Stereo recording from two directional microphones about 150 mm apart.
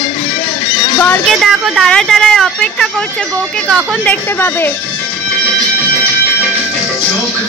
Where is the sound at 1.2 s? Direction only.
Centre (ahead or behind); by 4.7 s 15° left (ahead or behind).